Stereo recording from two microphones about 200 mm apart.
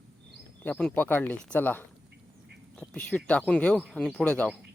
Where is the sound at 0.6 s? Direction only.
5° left (ahead or behind).